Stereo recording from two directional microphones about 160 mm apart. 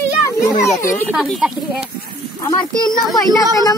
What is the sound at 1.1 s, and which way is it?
Speech, centre (ahead or behind).